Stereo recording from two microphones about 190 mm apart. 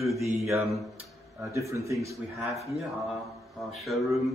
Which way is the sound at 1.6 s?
15° right (ahead or behind).